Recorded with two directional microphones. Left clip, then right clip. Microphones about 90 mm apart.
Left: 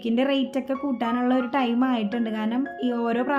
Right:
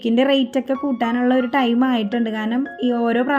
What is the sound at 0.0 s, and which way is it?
Speech, 40° right (ahead or behind).